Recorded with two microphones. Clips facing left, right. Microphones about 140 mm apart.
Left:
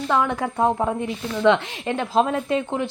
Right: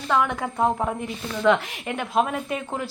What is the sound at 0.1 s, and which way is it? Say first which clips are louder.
Speech: left 1 dB; 25° left (ahead or behind).